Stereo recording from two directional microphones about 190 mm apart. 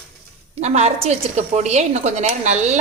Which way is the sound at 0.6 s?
35° right (ahead or behind).